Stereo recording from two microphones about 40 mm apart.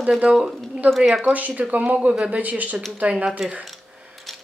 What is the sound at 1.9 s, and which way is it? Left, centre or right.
Speech, right.